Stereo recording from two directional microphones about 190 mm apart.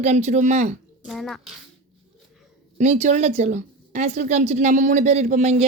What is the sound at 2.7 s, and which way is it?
A woman's voice, 35° right (ahead or behind).